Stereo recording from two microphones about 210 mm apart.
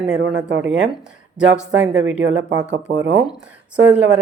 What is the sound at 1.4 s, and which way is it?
Speech, 5° right (ahead or behind).